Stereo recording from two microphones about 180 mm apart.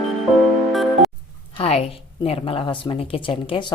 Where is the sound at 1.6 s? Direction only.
35° left (ahead or behind).